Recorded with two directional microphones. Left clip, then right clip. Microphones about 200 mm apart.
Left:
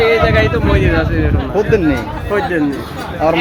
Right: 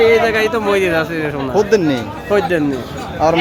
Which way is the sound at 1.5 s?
15° right (ahead or behind).